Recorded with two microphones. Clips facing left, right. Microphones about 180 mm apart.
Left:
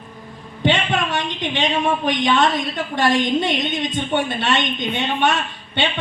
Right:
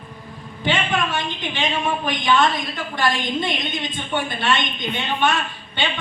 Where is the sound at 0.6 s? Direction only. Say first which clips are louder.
Left 3 dB; 75° left (ahead or behind).